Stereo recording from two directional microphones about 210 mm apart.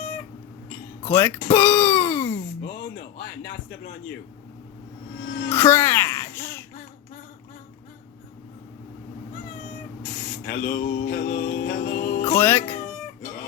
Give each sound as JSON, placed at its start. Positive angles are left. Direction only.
{"t": 1.0, "sound": "speech", "side_deg": 10}
{"t": 1.5, "sound": "music", "side_deg": 10}
{"t": 2.9, "sound": "a man's voice", "side_deg": 50}
{"t": 5.5, "sound": "speech", "side_deg": 10}
{"t": 10.4, "sound": "mantra", "side_deg": 50}
{"t": 11.5, "sound": "music", "side_deg": 40}
{"t": 12.2, "sound": "music", "side_deg": 10}